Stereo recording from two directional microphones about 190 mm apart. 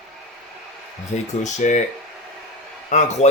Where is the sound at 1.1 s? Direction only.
40° left (ahead or behind).